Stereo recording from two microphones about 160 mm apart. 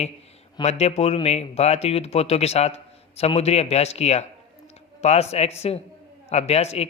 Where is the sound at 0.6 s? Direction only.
40° left (ahead or behind).